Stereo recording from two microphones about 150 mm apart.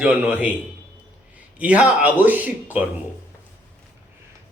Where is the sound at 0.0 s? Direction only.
10° right (ahead or behind).